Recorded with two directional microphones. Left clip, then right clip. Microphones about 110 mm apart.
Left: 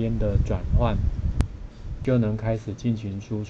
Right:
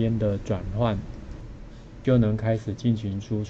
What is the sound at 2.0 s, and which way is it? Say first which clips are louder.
Speech: right 1 dB; 20° right (ahead or behind).